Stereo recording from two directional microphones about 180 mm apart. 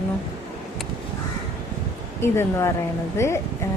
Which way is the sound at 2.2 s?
15° left (ahead or behind).